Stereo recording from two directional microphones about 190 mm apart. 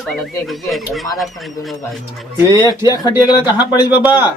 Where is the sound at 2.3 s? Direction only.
20° right (ahead or behind).